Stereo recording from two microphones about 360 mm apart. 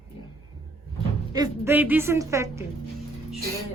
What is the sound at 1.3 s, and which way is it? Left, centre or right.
A woman's voice, centre.